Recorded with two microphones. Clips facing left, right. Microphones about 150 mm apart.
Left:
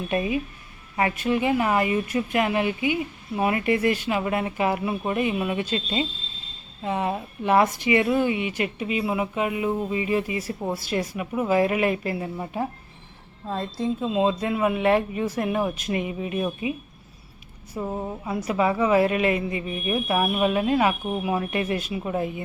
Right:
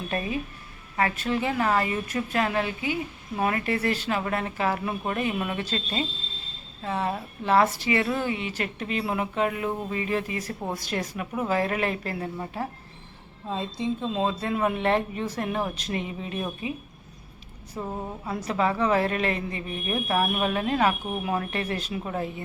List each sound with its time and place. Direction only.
0.1 s speech: 15° left (ahead or behind)
14.0 s speech: 10° left (ahead or behind)
17.7 s speech: 5° left (ahead or behind)